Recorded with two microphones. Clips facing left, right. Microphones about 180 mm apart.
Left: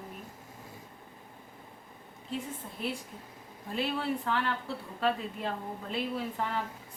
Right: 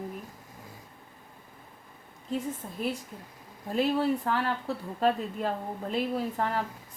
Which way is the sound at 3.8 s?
40° right (ahead or behind).